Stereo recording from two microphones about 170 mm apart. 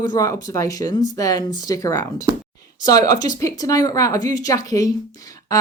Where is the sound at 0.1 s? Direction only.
20° left (ahead or behind).